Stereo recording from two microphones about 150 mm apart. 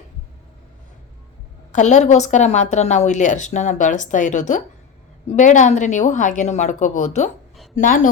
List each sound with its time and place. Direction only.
1.7 s a woman's voice: 50° left (ahead or behind)
7.8 s a woman's voice: 60° left (ahead or behind)